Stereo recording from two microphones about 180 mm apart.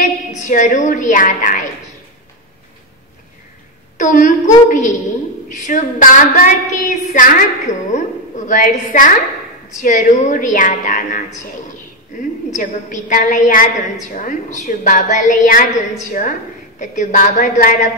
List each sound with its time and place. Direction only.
0.3 s a woman's voice: 45° left (ahead or behind)
4.0 s a woman's voice: 45° left (ahead or behind)
12.5 s a woman's voice: 45° left (ahead or behind)